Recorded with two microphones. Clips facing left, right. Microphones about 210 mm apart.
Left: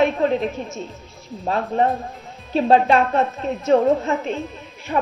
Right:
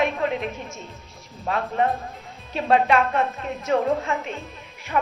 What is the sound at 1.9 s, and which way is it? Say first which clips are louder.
Music: left 3 dB; centre (ahead or behind).